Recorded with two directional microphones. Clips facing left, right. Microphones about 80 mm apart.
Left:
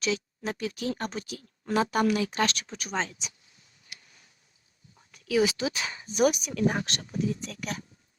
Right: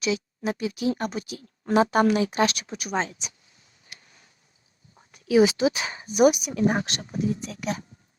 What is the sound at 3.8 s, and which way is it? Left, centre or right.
Tick-tock, right.